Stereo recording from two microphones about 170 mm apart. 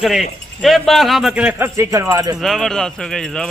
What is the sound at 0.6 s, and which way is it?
A man's voice, centre (ahead or behind).